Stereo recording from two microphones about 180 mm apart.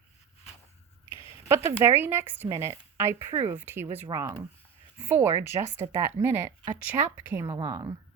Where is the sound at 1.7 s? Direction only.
15° right (ahead or behind).